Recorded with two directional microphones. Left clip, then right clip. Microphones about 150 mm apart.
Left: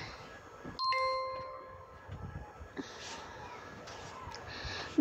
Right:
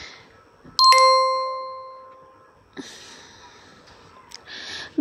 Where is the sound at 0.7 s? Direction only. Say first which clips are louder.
Right 19 dB; 80° right.